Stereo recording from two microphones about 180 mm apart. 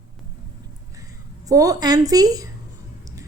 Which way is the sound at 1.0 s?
20° right (ahead or behind).